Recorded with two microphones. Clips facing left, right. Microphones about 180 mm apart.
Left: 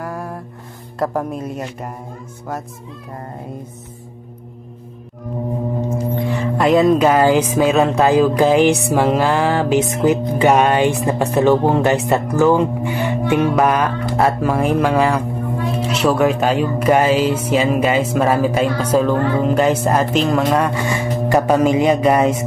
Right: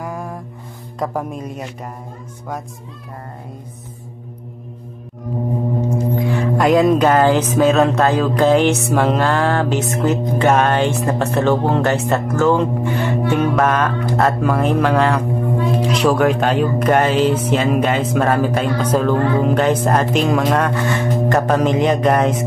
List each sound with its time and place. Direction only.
0.0 s music: centre (ahead or behind)
0.9 s speech: 5° left (ahead or behind)
6.1 s music: centre (ahead or behind)
13.6 s speech: 5° left (ahead or behind)
18.1 s music: 5° left (ahead or behind)